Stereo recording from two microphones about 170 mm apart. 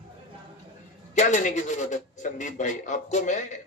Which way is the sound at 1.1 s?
45° left (ahead or behind).